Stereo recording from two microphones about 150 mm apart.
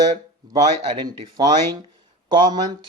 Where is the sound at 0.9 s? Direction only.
25° right (ahead or behind).